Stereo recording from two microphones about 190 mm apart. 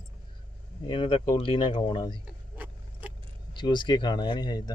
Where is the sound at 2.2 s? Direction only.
10° right (ahead or behind).